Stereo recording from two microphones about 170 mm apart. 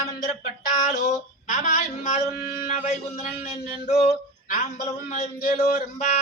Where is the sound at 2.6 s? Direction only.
40° left (ahead or behind).